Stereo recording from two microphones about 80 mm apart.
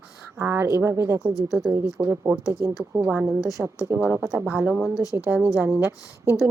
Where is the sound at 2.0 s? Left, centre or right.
Right.